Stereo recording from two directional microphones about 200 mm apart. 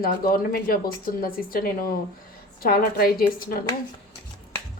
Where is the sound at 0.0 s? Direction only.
45° left (ahead or behind).